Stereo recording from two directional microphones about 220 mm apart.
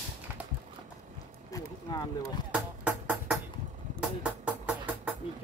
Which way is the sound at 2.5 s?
5° right (ahead or behind).